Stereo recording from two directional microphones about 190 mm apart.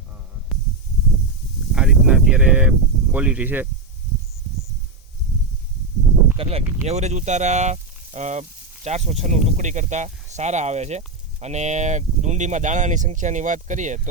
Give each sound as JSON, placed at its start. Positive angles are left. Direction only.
{"t": 1.7, "sound": "speech", "side_deg": -5}
{"t": 6.3, "sound": "speech", "side_deg": -30}